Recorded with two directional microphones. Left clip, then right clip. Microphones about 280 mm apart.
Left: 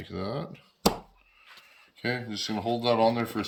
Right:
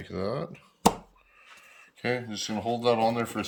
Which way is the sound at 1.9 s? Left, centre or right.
Centre.